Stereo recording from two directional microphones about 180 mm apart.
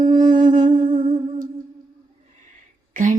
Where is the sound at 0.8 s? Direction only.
30° right (ahead or behind).